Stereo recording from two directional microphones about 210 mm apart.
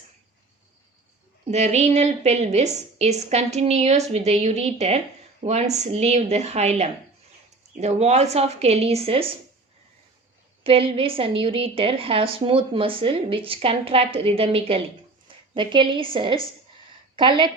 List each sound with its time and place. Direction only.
1.5 s a woman's voice: 30° right (ahead or behind)
10.6 s a woman's voice: 25° right (ahead or behind)